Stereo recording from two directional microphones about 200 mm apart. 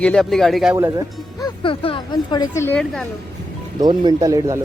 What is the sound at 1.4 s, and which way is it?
Speech, 25° left (ahead or behind).